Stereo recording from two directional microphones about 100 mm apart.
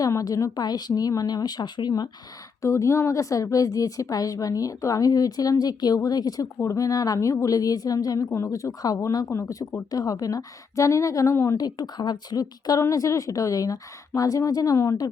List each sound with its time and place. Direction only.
0.0 s a woman's voice: 35° left (ahead or behind)
2.6 s a woman's voice: 30° left (ahead or behind)